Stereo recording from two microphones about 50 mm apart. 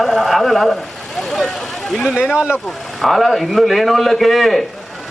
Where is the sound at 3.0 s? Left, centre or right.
Centre.